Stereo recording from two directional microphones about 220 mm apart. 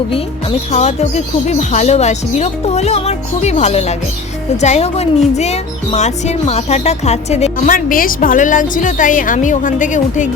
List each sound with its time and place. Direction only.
0.7 s speech: 30° left (ahead or behind)